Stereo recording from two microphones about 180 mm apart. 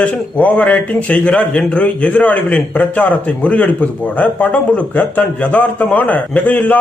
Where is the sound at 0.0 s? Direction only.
5° left (ahead or behind).